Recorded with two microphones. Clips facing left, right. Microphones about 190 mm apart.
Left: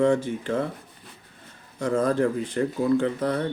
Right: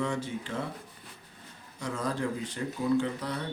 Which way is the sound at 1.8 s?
55° left (ahead or behind).